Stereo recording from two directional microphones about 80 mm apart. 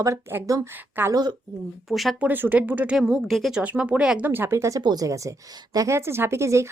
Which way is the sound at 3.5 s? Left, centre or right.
Centre.